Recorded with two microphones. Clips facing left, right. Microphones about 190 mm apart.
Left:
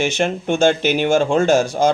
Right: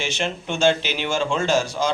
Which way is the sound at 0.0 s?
50° left (ahead or behind).